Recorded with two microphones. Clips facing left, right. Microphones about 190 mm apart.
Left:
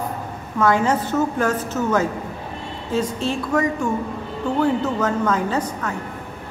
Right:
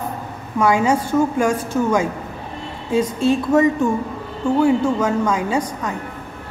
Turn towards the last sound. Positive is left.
turn(degrees=-15)  # may be behind; listen again after turning